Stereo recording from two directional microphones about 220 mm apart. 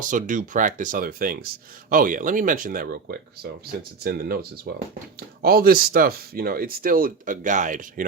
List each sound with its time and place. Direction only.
0.0 s speech: 35° right (ahead or behind)